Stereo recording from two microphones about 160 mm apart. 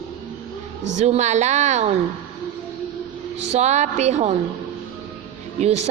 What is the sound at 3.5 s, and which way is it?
Speech, 45° right (ahead or behind).